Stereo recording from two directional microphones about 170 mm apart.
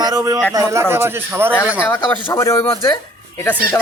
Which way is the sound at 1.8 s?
15° left (ahead or behind).